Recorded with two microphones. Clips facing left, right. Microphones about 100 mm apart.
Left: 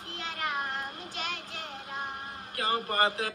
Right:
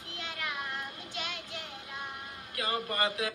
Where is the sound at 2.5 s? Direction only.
40° left (ahead or behind).